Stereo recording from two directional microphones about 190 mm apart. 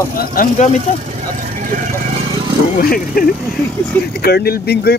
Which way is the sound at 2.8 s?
50° left (ahead or behind).